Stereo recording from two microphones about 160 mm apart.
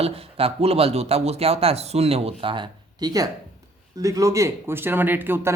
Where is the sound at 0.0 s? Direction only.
35° right (ahead or behind).